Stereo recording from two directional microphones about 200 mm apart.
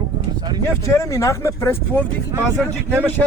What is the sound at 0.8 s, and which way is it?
Speech, 15° left (ahead or behind).